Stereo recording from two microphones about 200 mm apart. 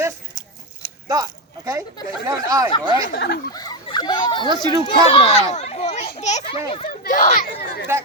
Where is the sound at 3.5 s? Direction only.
20° left (ahead or behind); by 7.5 s 40° left (ahead or behind).